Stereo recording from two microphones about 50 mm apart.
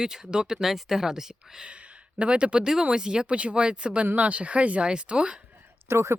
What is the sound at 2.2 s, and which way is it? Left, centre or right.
Speech, right.